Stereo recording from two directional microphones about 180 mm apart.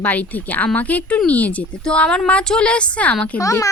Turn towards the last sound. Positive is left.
turn(degrees=20)  # may be behind; listen again after turning